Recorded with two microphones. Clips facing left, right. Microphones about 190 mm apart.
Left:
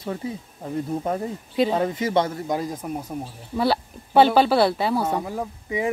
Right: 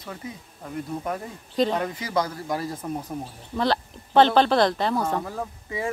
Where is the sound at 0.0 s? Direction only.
25° left (ahead or behind).